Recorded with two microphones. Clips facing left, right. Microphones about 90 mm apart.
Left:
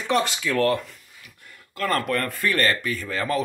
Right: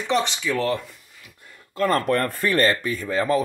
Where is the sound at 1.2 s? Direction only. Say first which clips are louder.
Right 2 dB; 25° right (ahead or behind).